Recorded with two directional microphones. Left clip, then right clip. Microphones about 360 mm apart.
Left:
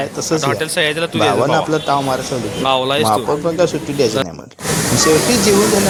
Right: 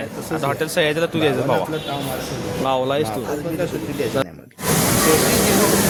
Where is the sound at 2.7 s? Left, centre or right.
Centre.